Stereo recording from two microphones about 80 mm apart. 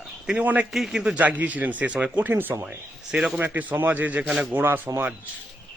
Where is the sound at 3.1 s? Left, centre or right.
Centre.